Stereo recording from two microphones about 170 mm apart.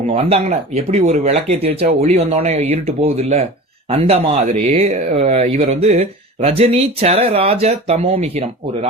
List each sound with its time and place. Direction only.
0.1 s speech: 40° right (ahead or behind)